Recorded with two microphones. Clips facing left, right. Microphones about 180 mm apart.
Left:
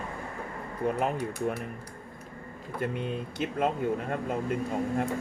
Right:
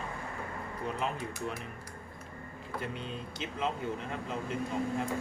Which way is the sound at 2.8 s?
55° left (ahead or behind).